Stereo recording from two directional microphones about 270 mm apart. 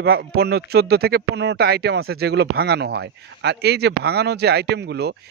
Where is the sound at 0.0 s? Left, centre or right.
Right.